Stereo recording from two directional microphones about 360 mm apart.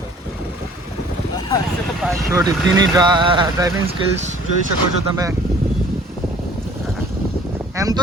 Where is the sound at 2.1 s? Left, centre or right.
Centre.